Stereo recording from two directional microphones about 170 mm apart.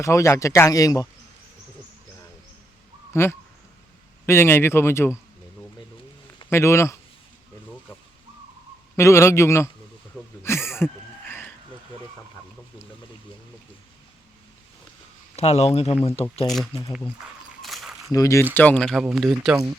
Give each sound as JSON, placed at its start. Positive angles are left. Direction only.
{"t": 0.0, "sound": "speech", "side_deg": 15}
{"t": 3.1, "sound": "speech", "side_deg": 15}
{"t": 6.5, "sound": "speech", "side_deg": 15}
{"t": 9.0, "sound": "speech", "side_deg": 15}
{"t": 10.4, "sound": "a sound", "side_deg": 15}
{"t": 15.4, "sound": "speech", "side_deg": 35}
{"t": 17.6, "sound": "a sound", "side_deg": 0}
{"t": 18.1, "sound": "speech", "side_deg": 20}